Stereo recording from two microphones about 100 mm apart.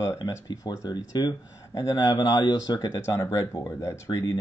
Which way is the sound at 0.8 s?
45° left (ahead or behind).